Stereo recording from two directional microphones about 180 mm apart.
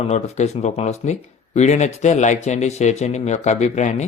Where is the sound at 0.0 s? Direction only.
40° left (ahead or behind).